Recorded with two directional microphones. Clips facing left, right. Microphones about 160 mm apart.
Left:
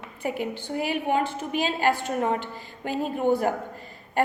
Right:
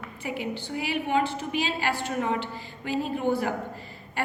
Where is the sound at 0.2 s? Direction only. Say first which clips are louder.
Left 3 dB; 50° left (ahead or behind).